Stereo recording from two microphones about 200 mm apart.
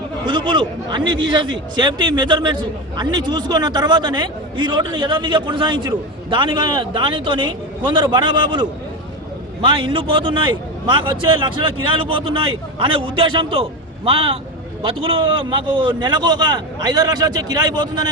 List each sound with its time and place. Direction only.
0.3 s a man's voice: 25° right (ahead or behind)